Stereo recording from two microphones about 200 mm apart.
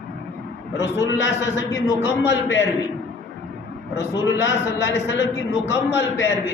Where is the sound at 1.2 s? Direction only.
65° left (ahead or behind).